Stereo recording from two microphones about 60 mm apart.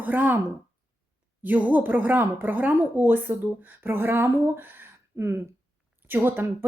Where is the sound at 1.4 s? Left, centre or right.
Right.